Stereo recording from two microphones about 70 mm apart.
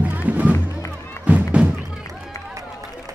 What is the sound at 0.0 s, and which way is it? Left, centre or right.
Music, right.